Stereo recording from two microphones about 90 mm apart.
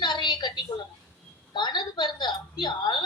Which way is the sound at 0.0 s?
55° left (ahead or behind).